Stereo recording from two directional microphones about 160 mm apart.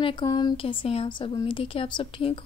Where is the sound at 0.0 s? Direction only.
30° left (ahead or behind).